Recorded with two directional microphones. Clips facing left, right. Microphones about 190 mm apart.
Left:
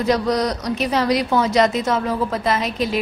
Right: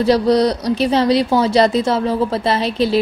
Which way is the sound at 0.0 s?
30° right (ahead or behind).